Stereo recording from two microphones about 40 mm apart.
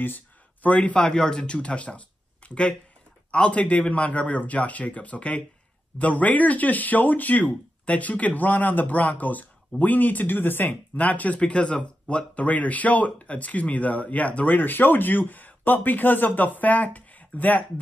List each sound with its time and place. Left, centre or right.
0.0 s a sound: left
0.7 s speech: left
11.3 s speech: left